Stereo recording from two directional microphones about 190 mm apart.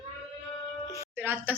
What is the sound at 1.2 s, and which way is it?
Speech, 10° right (ahead or behind).